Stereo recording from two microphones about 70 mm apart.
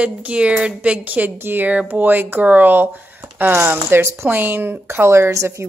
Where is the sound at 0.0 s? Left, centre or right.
Centre.